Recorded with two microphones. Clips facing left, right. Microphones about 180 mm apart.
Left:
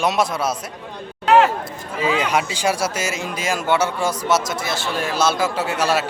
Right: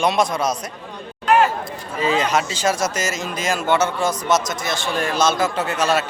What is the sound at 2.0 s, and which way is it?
A man's voice, 10° left (ahead or behind).